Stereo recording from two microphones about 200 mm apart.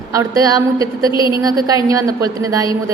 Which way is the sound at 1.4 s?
20° right (ahead or behind).